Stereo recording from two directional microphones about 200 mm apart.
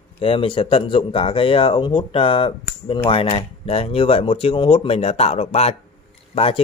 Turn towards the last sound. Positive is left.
turn(degrees=30)  # may be behind; listen again after turning